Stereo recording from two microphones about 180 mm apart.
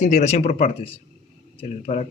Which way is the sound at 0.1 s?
40° left (ahead or behind).